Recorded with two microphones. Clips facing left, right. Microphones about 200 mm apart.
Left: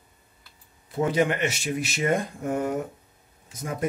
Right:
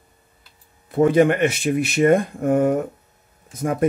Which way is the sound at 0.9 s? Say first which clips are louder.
Right 8 dB; 55° right (ahead or behind).